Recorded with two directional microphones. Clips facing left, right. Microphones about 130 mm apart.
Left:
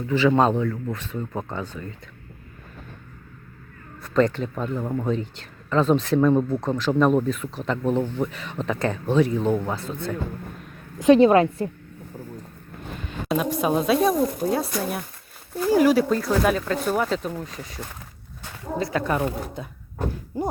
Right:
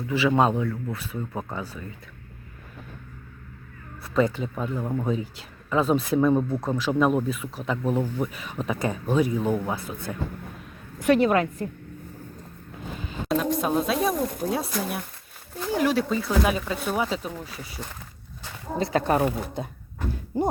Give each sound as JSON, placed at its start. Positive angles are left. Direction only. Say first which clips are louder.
{"t": 0.1, "sound": "speech", "louder": "left 3 dB", "side_deg": -10}
{"t": 4.0, "sound": "speech", "louder": "left 3 dB", "side_deg": -10}
{"t": 11.0, "sound": "a woman's voice", "louder": "left 6 dB", "side_deg": 25}
{"t": 13.1, "sound": "speech", "louder": "even", "side_deg": 5}
{"t": 18.8, "sound": "speech", "louder": "right 2 dB", "side_deg": -30}